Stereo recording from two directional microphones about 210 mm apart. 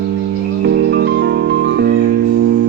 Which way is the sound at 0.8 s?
55° right (ahead or behind).